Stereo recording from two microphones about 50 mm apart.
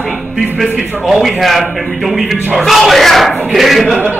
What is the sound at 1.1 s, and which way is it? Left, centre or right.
A woman's voice, centre.